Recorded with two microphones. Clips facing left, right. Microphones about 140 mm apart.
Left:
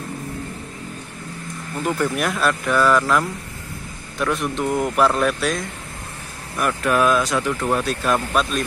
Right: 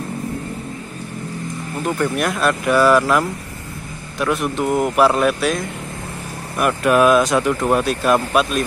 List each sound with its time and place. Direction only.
1.9 s a man's voice: centre (ahead or behind)
6.6 s speech: 15° right (ahead or behind)